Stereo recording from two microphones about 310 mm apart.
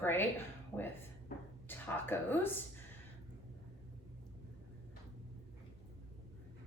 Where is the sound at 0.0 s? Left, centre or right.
Centre.